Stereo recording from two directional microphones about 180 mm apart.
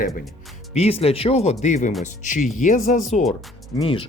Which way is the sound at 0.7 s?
35° left (ahead or behind).